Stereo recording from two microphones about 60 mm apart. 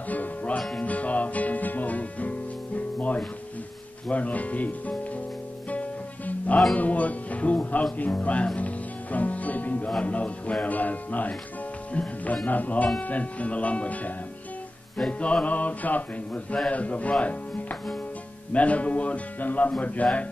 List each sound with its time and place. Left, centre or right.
0.1 s music: left
4.1 s speech: left
5.7 s music: left
6.8 s speech: left
8.5 s music: left
9.8 s music: centre
10.1 s speech: left